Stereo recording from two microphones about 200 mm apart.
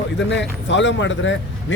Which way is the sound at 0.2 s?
65° left (ahead or behind).